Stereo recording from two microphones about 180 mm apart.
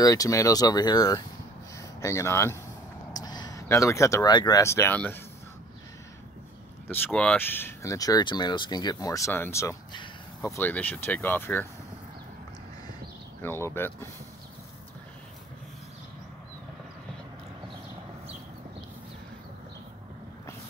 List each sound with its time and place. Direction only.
0.0 s speech: 20° left (ahead or behind)
6.9 s speech: 5° left (ahead or behind)
13.4 s speech: 15° left (ahead or behind)